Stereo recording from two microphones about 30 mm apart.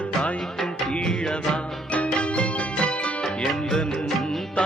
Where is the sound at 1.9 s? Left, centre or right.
Left.